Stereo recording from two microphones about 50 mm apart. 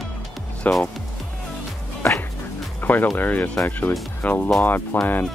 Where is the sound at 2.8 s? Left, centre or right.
Left.